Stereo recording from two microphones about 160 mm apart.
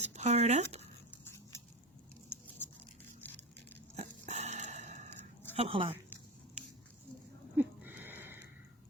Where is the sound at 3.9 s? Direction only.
45° right (ahead or behind).